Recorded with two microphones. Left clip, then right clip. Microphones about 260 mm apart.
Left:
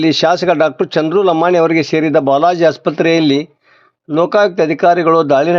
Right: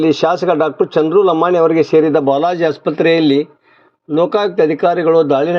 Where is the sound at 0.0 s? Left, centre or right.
Left.